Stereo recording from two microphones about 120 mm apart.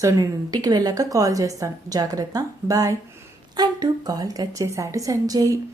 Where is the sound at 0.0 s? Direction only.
30° right (ahead or behind).